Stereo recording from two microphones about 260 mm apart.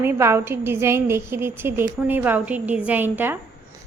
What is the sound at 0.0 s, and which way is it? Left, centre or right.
A woman's voice, centre.